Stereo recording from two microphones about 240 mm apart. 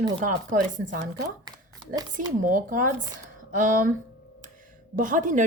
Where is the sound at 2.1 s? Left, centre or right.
Right.